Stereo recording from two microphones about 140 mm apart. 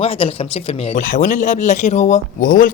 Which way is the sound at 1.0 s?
70° left (ahead or behind).